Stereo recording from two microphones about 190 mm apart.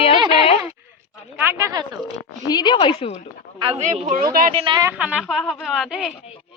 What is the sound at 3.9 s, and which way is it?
Speech, 40° right (ahead or behind).